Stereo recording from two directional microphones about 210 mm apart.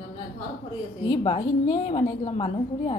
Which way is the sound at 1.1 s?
25° left (ahead or behind).